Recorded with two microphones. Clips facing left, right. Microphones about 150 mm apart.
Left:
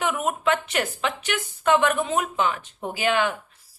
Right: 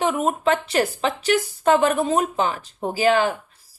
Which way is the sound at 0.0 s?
30° right (ahead or behind).